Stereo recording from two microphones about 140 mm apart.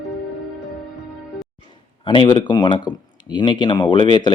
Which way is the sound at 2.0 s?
35° left (ahead or behind).